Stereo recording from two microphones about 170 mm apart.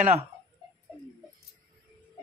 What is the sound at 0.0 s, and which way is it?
Speech, 40° right (ahead or behind).